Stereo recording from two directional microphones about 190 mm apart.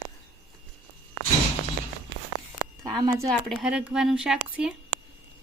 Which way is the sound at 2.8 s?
20° right (ahead or behind).